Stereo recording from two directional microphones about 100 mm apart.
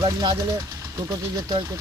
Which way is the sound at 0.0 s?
45° right (ahead or behind).